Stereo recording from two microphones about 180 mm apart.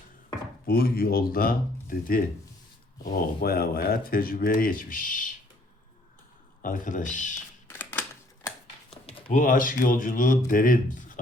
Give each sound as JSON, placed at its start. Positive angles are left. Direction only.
{"t": 0.7, "sound": "speech", "side_deg": 55}
{"t": 6.6, "sound": "speech", "side_deg": 45}
{"t": 7.7, "sound": "typewriter", "side_deg": 10}
{"t": 8.9, "sound": "a sound", "side_deg": 30}
{"t": 9.3, "sound": "speech", "side_deg": 50}